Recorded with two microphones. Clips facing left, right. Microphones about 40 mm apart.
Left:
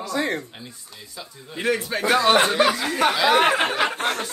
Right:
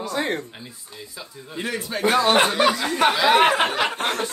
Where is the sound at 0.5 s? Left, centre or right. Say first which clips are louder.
Right 1 dB; centre.